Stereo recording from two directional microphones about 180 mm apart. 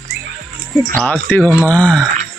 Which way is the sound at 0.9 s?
10° left (ahead or behind).